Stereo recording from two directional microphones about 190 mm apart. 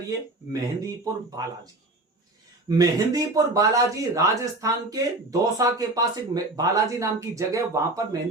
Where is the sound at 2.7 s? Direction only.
20° right (ahead or behind).